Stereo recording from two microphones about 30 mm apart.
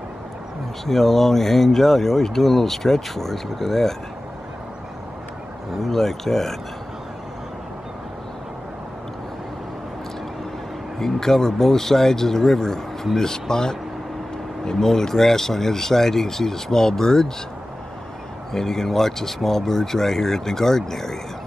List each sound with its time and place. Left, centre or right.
0.8 s speech: centre
5.7 s speech: centre
11.0 s speech: centre
18.5 s speech: centre